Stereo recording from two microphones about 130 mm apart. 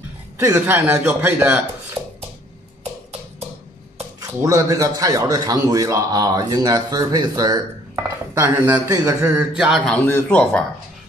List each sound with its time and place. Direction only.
0.4 s a man's voice: 20° right (ahead or behind)
2.0 s a sound: 5° right (ahead or behind)
4.4 s a man's voice: 25° right (ahead or behind)
7.9 s dishes: 20° right (ahead or behind)
8.8 s a man's voice: 25° right (ahead or behind)
9.8 s a man's voice: 15° left (ahead or behind)